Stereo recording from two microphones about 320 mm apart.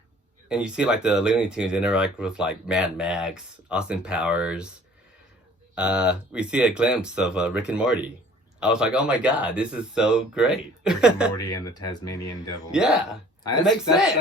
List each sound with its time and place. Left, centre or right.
0.4 s speech: centre
5.7 s speech: centre
11.4 s speech: centre
12.7 s speech: centre